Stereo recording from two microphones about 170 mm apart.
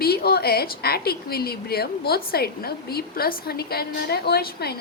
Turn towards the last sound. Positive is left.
turn(degrees=70)  # may be behind; listen again after turning